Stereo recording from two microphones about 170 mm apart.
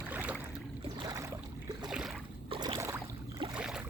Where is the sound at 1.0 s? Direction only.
20° right (ahead or behind).